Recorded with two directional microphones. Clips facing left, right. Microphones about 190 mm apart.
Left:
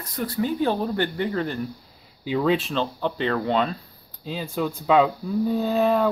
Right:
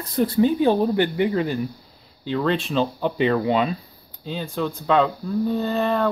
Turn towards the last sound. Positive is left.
turn(degrees=5)  # may be behind; listen again after turning